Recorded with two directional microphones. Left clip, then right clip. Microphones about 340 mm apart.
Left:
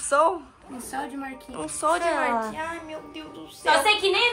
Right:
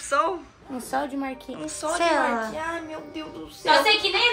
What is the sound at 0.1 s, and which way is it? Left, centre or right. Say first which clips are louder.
Speech: left 3 dB; centre.